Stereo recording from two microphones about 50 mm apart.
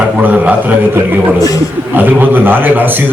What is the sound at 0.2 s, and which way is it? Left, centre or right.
Speech, right.